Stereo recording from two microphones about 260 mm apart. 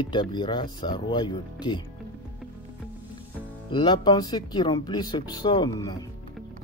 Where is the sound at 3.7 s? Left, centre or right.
Centre.